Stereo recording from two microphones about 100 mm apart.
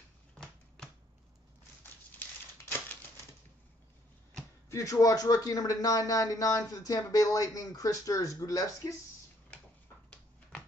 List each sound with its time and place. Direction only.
4.6 s speech: 35° left (ahead or behind)